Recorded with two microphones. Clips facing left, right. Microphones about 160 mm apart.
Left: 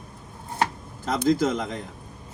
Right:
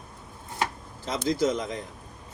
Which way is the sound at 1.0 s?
55° left (ahead or behind).